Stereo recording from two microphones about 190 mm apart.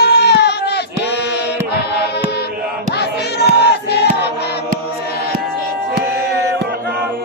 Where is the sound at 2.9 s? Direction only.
60° left (ahead or behind).